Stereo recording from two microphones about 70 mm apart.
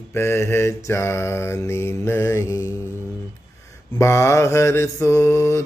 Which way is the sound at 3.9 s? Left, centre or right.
Left.